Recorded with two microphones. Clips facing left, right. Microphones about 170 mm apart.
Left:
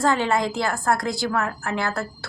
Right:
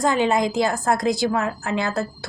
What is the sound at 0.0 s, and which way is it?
A woman's voice, 15° right (ahead or behind).